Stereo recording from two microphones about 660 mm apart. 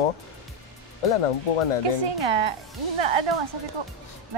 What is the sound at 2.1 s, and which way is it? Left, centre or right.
Speech, right.